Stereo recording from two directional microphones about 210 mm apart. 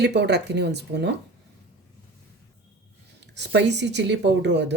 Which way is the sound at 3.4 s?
55° right (ahead or behind).